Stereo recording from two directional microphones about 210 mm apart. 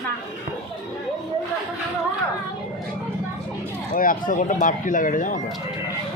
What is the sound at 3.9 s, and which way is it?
Speech, 40° left (ahead or behind).